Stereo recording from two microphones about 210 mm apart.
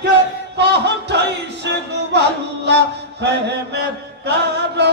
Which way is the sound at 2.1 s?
55° right (ahead or behind).